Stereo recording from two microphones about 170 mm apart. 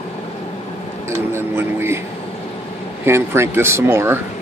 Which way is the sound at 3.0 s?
15° right (ahead or behind).